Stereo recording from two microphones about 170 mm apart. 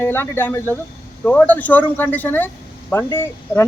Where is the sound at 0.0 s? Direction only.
15° left (ahead or behind).